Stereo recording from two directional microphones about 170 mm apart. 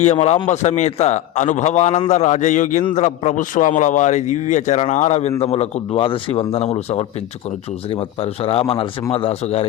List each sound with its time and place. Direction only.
0.0 s a man's voice: 40° left (ahead or behind)
8.2 s speech: 35° left (ahead or behind)